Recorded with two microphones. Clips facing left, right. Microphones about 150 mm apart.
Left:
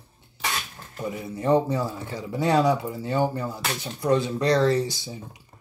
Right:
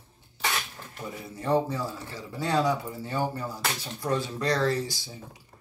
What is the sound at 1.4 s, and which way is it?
Speech, 20° left (ahead or behind).